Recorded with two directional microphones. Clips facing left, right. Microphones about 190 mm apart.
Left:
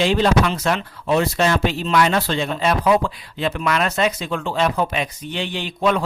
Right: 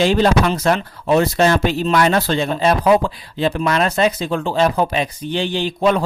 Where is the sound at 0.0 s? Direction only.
40° right (ahead or behind).